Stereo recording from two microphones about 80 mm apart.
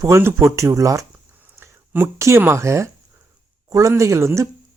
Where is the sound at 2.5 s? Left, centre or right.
Right.